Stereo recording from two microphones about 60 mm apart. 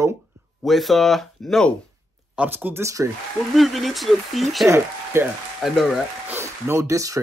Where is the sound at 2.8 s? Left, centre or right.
Right.